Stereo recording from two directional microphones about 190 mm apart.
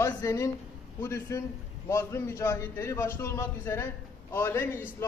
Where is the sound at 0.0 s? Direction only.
15° left (ahead or behind).